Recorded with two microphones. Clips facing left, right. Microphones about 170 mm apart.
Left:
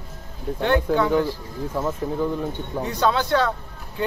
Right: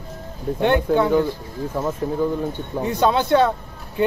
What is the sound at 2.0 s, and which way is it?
Speech, 5° right (ahead or behind).